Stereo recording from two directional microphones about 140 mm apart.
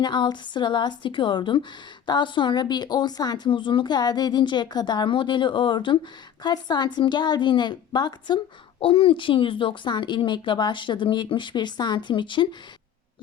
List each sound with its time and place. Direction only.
0.0 s speech: 30° left (ahead or behind)